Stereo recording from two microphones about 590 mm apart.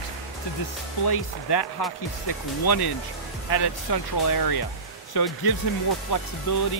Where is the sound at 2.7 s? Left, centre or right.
Left.